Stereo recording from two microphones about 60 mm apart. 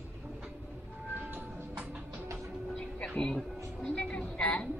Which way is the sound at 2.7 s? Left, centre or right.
Centre.